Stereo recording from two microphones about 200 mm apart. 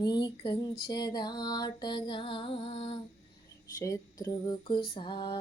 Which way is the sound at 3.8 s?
15° left (ahead or behind).